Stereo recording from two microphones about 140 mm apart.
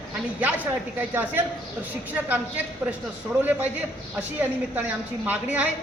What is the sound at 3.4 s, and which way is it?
A woman's voice, 10° right (ahead or behind).